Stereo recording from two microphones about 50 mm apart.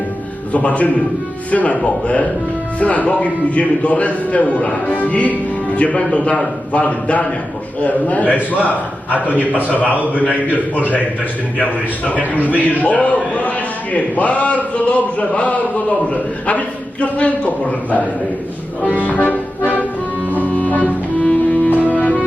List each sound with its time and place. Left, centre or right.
0.5 s a man's voice: left
18.9 s music: left
20.3 s accordion: left
21.2 s music: left